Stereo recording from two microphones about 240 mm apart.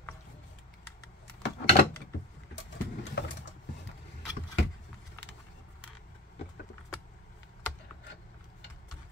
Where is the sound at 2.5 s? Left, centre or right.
Left.